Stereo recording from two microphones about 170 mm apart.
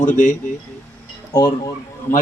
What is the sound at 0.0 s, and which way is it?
Speech, 50° left (ahead or behind).